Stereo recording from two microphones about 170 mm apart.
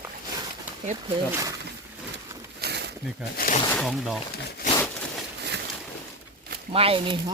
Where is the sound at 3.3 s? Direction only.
55° left (ahead or behind).